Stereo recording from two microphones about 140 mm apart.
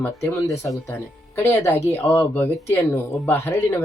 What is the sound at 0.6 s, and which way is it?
Speech, 20° left (ahead or behind).